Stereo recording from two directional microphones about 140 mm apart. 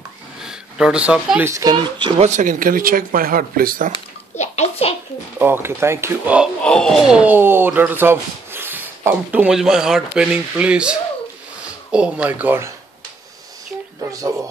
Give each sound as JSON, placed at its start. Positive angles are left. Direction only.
{"t": 0.4, "sound": "a sound", "side_deg": -5}
{"t": 1.4, "sound": "speech", "side_deg": -25}
{"t": 2.2, "sound": "speech", "side_deg": -65}
{"t": 4.4, "sound": "a sound", "side_deg": 50}
{"t": 5.4, "sound": "speech", "side_deg": -15}
{"t": 6.6, "sound": "speech", "side_deg": 5}
{"t": 7.2, "sound": "speech", "side_deg": -15}